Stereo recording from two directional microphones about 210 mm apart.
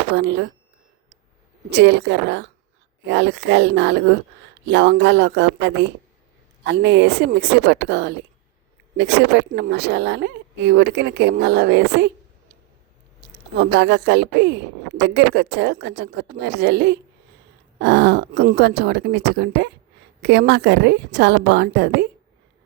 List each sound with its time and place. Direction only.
0.1 s speech: 55° right (ahead or behind)
1.7 s speech: 55° right (ahead or behind)
13.6 s speech: 55° right (ahead or behind)